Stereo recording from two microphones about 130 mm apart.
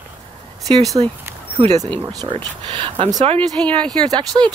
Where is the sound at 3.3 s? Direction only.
10° left (ahead or behind).